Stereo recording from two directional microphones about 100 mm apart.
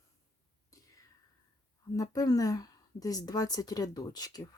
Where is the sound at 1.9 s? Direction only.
40° left (ahead or behind).